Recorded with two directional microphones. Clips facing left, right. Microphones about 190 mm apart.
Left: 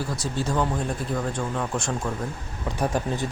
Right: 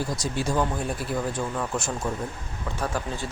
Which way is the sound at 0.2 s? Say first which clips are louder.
Left 1 dB; 10° right (ahead or behind).